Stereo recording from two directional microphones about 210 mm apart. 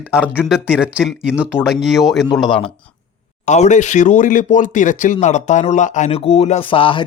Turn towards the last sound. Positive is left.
turn(degrees=25)  # may be behind; listen again after turning